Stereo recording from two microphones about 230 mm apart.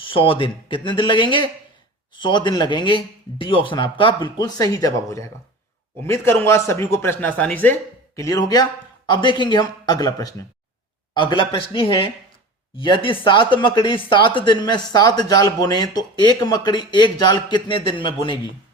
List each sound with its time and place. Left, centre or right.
0.0 s speech: left